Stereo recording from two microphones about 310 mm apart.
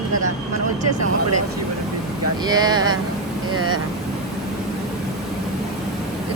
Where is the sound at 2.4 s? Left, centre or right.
Centre.